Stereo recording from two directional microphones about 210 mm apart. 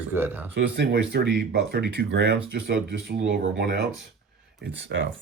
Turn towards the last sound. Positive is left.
turn(degrees=-60)  # may be behind; listen again after turning